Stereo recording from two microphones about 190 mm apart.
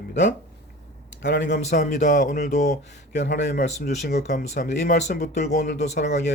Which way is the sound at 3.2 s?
65° left (ahead or behind).